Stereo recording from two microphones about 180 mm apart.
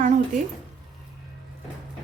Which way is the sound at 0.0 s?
40° right (ahead or behind).